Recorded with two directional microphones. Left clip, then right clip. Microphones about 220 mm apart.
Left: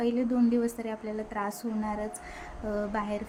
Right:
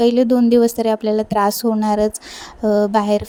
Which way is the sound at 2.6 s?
40° right (ahead or behind).